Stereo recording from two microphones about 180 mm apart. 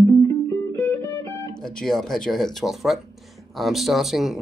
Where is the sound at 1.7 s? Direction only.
5° left (ahead or behind).